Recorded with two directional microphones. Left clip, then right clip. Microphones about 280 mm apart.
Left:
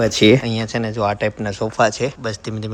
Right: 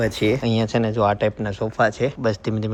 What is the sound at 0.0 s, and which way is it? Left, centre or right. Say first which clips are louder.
Speech: left 7 dB; left.